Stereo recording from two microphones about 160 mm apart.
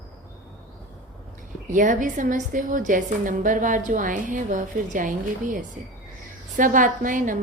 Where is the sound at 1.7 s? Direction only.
55° right (ahead or behind).